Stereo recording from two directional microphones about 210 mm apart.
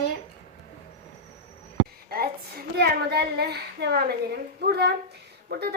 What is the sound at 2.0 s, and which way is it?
Speech, 45° right (ahead or behind).